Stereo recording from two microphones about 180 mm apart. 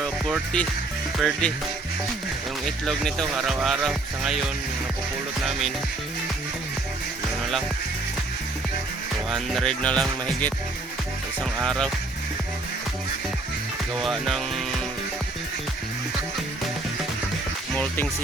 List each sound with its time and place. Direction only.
0.0 s music: 5° left (ahead or behind)
1.2 s speech: 5° left (ahead or behind)
2.6 s speech: centre (ahead or behind)
5.5 s speech: centre (ahead or behind)
9.3 s speech: 5° left (ahead or behind)
11.6 s speech: 5° left (ahead or behind)
14.0 s speech: centre (ahead or behind)
17.7 s speech: 10° left (ahead or behind)